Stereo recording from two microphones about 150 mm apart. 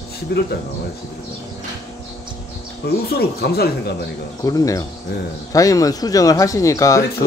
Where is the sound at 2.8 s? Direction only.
90° left.